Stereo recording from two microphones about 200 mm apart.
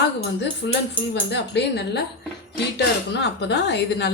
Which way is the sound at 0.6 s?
70° left (ahead or behind).